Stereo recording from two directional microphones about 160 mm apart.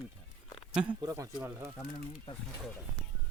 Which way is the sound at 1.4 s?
10° right (ahead or behind).